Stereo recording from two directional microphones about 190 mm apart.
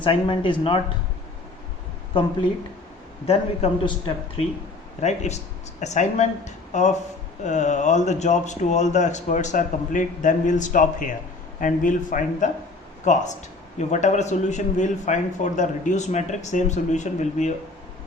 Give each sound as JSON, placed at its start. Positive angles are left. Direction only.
{"t": 0.0, "sound": "speech", "side_deg": 25}
{"t": 3.2, "sound": "a man's voice", "side_deg": 30}